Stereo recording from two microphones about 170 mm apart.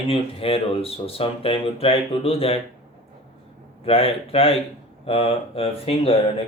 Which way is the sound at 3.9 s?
35° left (ahead or behind).